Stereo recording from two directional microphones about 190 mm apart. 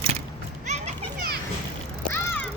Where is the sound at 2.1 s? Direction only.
10° left (ahead or behind).